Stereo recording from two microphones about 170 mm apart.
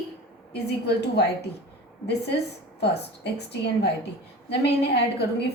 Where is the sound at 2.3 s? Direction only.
75° left (ahead or behind).